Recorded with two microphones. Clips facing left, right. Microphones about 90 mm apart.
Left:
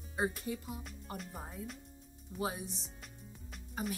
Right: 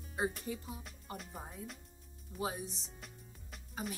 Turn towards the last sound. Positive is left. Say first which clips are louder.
# left 3 dB
turn(degrees=0)  # may be behind; listen again after turning